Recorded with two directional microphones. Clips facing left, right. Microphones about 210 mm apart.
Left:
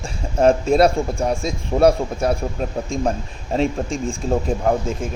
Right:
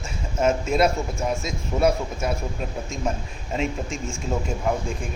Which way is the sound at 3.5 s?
35° left (ahead or behind).